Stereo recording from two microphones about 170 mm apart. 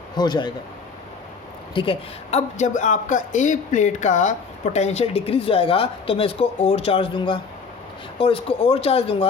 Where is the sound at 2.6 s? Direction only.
45° left (ahead or behind).